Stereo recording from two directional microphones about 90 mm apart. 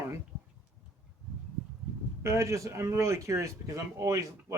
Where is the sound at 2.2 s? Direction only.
35° right (ahead or behind).